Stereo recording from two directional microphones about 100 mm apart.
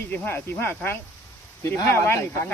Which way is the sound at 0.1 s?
20° left (ahead or behind).